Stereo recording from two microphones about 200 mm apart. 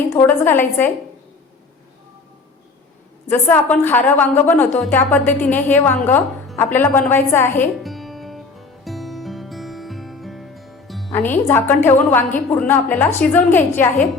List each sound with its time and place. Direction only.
0.1 s a woman's voice: 10° left (ahead or behind)
3.2 s a woman's voice: 10° left (ahead or behind)
7.8 s music: centre (ahead or behind)
11.1 s a woman's voice: 10° left (ahead or behind)